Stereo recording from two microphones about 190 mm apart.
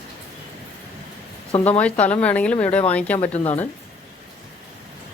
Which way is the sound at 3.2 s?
35° left (ahead or behind).